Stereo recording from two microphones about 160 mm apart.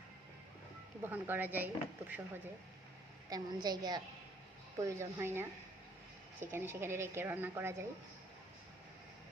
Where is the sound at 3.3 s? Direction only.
25° right (ahead or behind).